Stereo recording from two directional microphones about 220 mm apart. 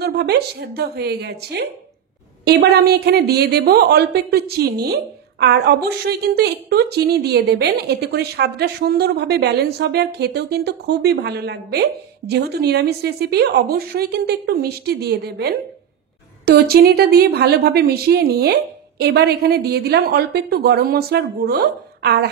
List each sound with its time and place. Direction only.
0.0 s a woman's voice: 45° right (ahead or behind)